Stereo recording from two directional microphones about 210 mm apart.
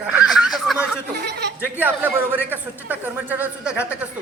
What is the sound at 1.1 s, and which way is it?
Speech, 50° right (ahead or behind).